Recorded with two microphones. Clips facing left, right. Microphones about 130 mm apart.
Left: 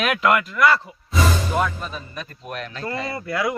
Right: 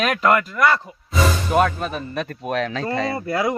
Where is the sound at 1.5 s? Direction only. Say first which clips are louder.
Right 5 dB; 75° right (ahead or behind); by 2.8 s 90° right.